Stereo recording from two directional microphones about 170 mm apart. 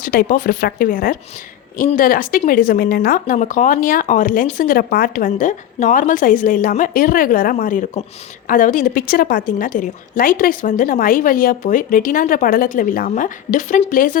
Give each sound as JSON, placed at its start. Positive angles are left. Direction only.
{"t": 0.0, "sound": "a woman's voice", "side_deg": 55}